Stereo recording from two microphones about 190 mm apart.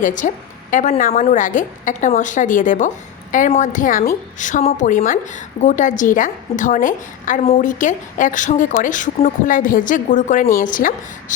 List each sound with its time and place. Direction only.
0.0 s a woman's voice: 40° left (ahead or behind)